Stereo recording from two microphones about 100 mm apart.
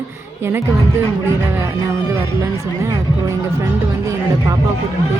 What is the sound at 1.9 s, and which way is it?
Speech, 30° right (ahead or behind).